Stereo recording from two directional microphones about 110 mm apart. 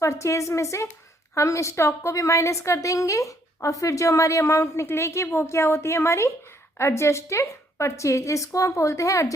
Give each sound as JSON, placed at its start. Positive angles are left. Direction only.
{"t": 0.0, "sound": "a woman's voice", "side_deg": 25}